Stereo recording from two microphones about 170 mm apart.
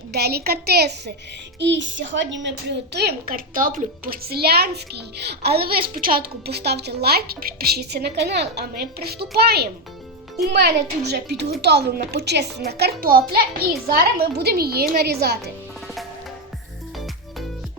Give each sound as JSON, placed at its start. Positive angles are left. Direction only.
{"t": 0.1, "sound": "a woman's voice", "side_deg": -70}
{"t": 1.5, "sound": "a woman's voice", "side_deg": -90}